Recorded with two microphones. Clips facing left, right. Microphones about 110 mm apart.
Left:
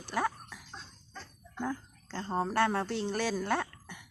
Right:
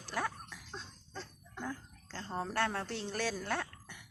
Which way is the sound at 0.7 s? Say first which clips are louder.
Right 1 dB; 5° left (ahead or behind).